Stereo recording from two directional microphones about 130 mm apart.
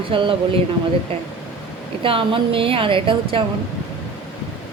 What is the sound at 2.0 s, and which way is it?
Speech, 40° right (ahead or behind).